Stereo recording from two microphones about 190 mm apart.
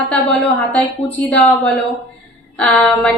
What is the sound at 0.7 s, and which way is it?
A woman's voice, 5° left (ahead or behind).